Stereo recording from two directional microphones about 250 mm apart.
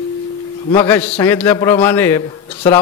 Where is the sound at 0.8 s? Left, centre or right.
Centre.